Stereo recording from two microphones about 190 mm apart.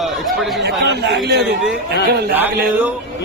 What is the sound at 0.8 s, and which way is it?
Speech, 60° right (ahead or behind).